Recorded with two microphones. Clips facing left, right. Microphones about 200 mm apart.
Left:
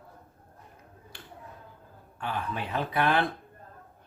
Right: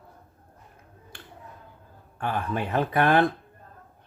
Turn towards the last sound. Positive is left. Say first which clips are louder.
# right 5 dB
turn(degrees=-50)  # may be behind; listen again after turning